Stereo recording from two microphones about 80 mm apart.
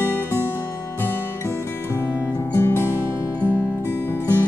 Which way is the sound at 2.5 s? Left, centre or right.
Left.